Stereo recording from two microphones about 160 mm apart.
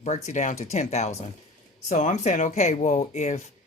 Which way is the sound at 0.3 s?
45° left (ahead or behind).